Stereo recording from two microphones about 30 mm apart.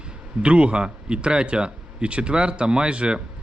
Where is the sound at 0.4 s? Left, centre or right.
Right.